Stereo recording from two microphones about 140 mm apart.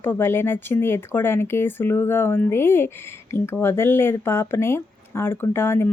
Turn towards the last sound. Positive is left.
turn(degrees=15)  # may be behind; listen again after turning